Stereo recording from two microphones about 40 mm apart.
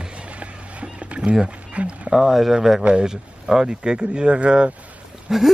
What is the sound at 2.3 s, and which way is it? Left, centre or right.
Speech, centre.